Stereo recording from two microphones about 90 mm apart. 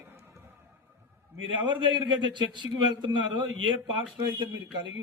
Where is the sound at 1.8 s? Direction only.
60° right (ahead or behind).